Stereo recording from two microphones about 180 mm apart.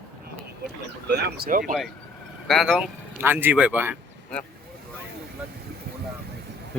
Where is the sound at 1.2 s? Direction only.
50° right (ahead or behind).